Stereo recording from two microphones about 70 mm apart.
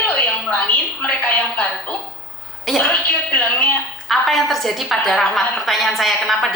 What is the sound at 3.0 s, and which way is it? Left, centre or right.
Speech, left.